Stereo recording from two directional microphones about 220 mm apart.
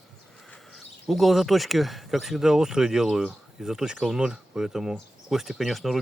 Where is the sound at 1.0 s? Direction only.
Centre (ahead or behind).